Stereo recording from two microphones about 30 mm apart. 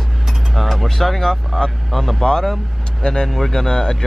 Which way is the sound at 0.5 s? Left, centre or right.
Centre.